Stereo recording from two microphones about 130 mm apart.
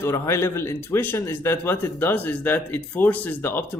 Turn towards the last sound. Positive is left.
turn(degrees=15)  # may be behind; listen again after turning